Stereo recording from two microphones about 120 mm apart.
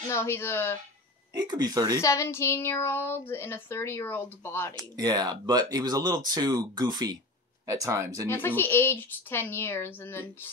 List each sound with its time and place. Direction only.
0.1 s speech: 20° left (ahead or behind)
1.3 s speech: 35° right (ahead or behind)
2.0 s speech: 25° left (ahead or behind)
4.9 s speech: 35° right (ahead or behind)
8.3 s a woman's voice: 20° left (ahead or behind)